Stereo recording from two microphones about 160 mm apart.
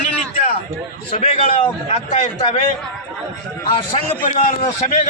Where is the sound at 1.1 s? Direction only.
35° left (ahead or behind).